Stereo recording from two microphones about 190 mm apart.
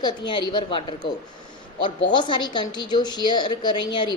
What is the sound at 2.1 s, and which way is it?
A woman's voice, 25° left (ahead or behind).